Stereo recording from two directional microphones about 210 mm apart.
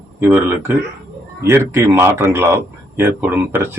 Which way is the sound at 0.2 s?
10° right (ahead or behind).